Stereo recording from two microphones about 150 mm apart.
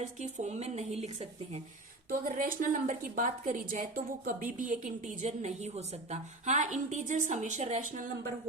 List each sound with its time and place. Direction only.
0.0 s a woman's voice: 50° right (ahead or behind)
2.0 s a woman's voice: 65° right (ahead or behind)